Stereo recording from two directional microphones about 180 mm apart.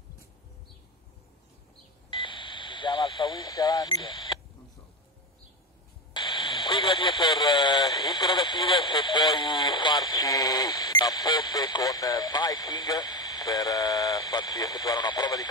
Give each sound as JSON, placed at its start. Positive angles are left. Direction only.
{"t": 2.0, "sound": "radio", "side_deg": 25}
{"t": 6.1, "sound": "speech", "side_deg": 25}